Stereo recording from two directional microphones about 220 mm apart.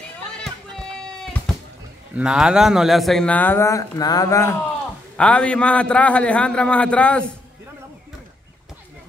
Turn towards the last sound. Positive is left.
turn(degrees=5)  # may be behind; listen again after turning